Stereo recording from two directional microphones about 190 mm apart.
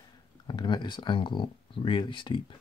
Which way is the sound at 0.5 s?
25° left (ahead or behind).